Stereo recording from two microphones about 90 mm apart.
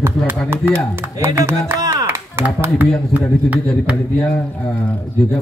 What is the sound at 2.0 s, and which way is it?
Clapping, 25° right (ahead or behind).